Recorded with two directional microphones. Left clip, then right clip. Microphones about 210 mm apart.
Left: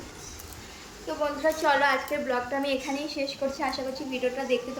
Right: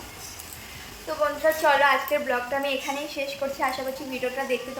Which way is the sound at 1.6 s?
5° right (ahead or behind).